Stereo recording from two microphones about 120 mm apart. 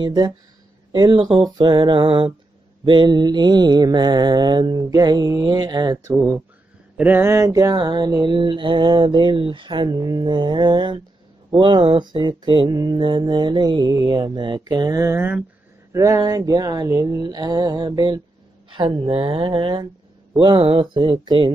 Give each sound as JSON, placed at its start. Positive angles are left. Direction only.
{"t": 0.0, "sound": "mantra", "side_deg": -35}
{"t": 6.0, "sound": "speech", "side_deg": -20}
{"t": 7.0, "sound": "mantra", "side_deg": -15}
{"t": 15.9, "sound": "mantra", "side_deg": -25}
{"t": 18.7, "sound": "speech", "side_deg": -45}